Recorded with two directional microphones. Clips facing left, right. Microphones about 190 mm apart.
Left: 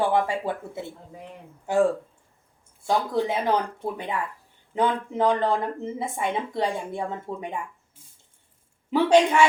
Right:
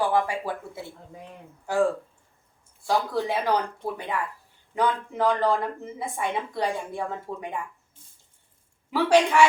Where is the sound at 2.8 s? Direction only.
20° left (ahead or behind).